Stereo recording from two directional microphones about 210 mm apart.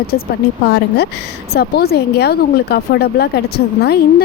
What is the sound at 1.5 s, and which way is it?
A woman's voice, 50° left (ahead or behind).